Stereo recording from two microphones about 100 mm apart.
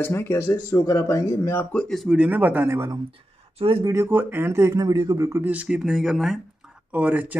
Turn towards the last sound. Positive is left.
turn(degrees=-15)  # may be behind; listen again after turning